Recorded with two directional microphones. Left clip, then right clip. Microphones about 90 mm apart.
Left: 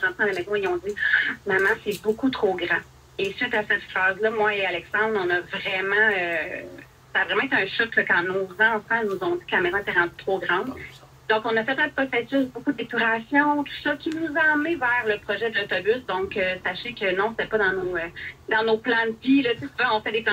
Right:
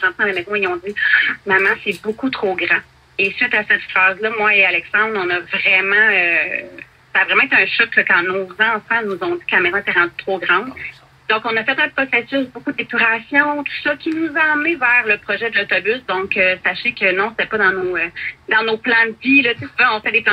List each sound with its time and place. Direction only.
0.0 s speech: 25° left (ahead or behind)
4.7 s speech: 15° left (ahead or behind)
5.1 s speech: 25° left (ahead or behind)